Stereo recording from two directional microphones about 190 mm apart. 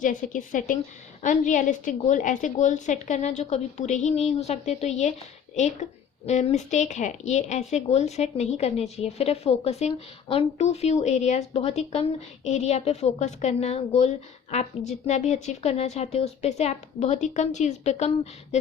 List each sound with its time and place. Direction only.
0.0 s a woman's voice: 40° left (ahead or behind)
6.2 s speech: 35° left (ahead or behind)